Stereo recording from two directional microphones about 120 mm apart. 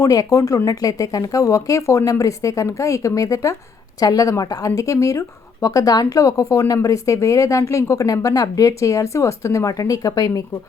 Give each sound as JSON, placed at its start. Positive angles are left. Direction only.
{"t": 0.0, "sound": "speech", "side_deg": 30}